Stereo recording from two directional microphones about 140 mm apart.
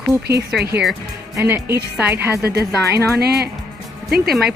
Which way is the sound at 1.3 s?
15° right (ahead or behind).